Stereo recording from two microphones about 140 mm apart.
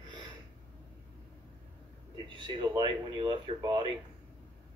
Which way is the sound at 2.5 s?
35° right (ahead or behind).